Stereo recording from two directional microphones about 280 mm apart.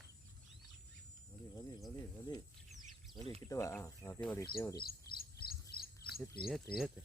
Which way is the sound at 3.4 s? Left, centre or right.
Centre.